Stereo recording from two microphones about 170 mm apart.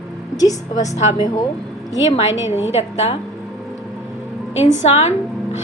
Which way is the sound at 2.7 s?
35° left (ahead or behind).